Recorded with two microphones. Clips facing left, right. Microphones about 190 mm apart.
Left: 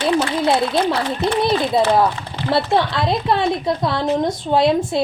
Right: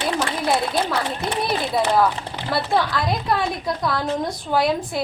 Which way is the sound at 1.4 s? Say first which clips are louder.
Left 4 dB; 25° left (ahead or behind).